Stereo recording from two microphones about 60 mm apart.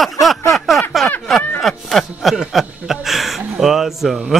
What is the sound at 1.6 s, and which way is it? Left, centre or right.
Speech, centre.